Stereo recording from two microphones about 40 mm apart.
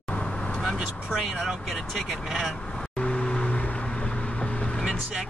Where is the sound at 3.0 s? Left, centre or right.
Left.